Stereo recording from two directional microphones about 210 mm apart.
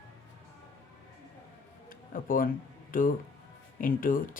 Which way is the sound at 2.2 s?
40° left (ahead or behind).